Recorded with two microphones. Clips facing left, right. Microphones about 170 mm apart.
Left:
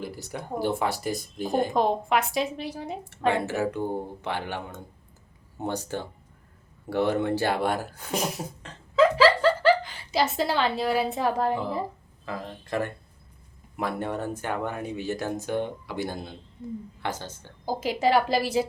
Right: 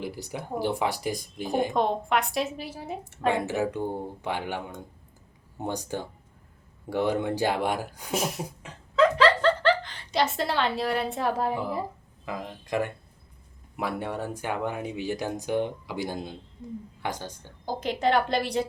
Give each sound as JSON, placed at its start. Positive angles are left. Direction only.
{"t": 0.0, "sound": "speech", "side_deg": -15}
{"t": 1.7, "sound": "a woman's voice", "side_deg": 0}
{"t": 3.6, "sound": "speech", "side_deg": -15}
{"t": 8.1, "sound": "a woman's voice", "side_deg": 0}
{"t": 9.0, "sound": "a sound", "side_deg": 5}
{"t": 12.2, "sound": "speech", "side_deg": -15}
{"t": 17.7, "sound": "a woman's voice", "side_deg": 5}